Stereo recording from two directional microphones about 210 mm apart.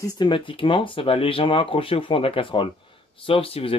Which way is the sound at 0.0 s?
20° left (ahead or behind).